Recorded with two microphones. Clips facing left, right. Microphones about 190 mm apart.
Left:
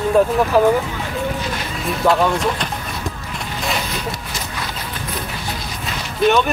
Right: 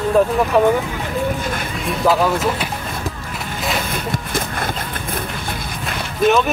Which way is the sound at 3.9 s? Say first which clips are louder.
Right 4 dB; 50° right (ahead or behind).